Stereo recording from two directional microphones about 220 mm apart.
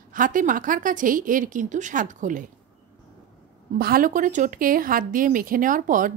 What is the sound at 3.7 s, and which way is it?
Speech, 40° right (ahead or behind).